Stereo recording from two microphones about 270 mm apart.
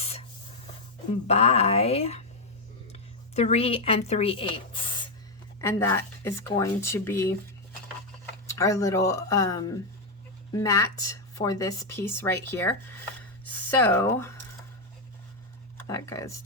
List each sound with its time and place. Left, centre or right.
1.3 s a woman's voice: left
8.4 s a woman's voice: centre
15.9 s a woman's voice: centre